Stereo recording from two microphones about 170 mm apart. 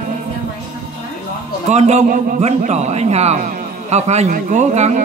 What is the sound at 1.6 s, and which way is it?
A man's voice, 40° right (ahead or behind).